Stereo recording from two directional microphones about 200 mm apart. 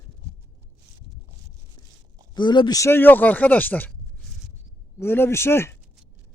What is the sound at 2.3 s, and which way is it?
Speech, 20° left (ahead or behind).